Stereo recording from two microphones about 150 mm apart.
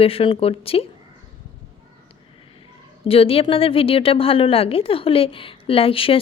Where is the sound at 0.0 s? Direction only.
40° left (ahead or behind).